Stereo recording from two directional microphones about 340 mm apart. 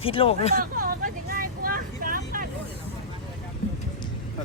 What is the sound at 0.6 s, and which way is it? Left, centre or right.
Vehicle, right.